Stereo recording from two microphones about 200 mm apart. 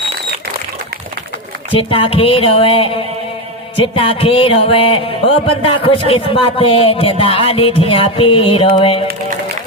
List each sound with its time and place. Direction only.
1.7 s speech: 25° left (ahead or behind)